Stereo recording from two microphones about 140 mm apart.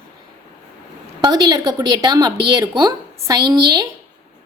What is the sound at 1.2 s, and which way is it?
Speech, 30° right (ahead or behind).